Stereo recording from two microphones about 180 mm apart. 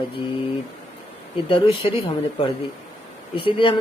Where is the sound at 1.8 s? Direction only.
35° left (ahead or behind).